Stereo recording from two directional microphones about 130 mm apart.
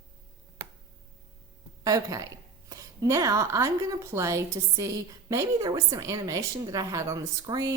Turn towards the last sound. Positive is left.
turn(degrees=-30)  # may be behind; listen again after turning